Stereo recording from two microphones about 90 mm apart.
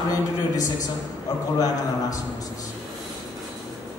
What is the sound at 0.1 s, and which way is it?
Speech, 40° left (ahead or behind).